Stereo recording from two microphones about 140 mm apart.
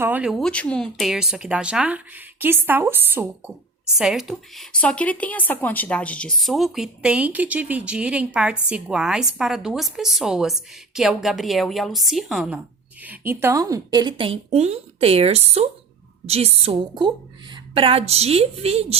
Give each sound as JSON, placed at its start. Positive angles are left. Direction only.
{"t": 0.0, "sound": "speech", "side_deg": -15}
{"t": 0.3, "sound": "speech", "side_deg": 5}
{"t": 13.0, "sound": "a woman's voice", "side_deg": -15}